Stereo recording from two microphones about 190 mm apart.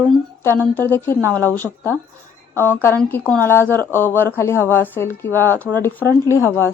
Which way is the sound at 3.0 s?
5° left (ahead or behind).